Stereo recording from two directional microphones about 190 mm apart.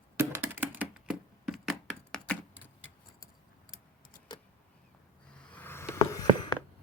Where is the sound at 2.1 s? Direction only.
5° left (ahead or behind).